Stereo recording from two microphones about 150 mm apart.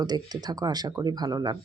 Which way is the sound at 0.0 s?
25° right (ahead or behind).